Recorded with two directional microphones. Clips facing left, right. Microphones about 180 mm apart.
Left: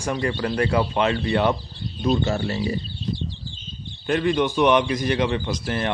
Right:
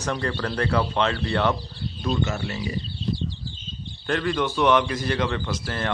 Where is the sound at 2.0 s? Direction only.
25° left (ahead or behind).